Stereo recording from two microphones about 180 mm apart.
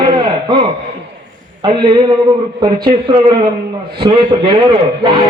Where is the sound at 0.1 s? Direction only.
25° right (ahead or behind).